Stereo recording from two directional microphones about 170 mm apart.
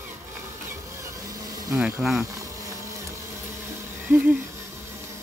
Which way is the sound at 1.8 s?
Centre (ahead or behind).